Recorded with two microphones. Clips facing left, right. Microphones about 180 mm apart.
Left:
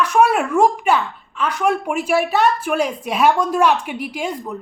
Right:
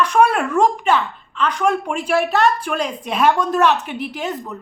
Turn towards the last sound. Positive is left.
turn(degrees=10)  # may be behind; listen again after turning